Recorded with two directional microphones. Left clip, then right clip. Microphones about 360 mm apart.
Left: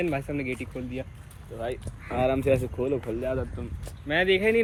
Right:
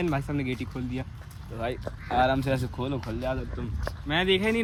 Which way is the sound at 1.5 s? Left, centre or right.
Right.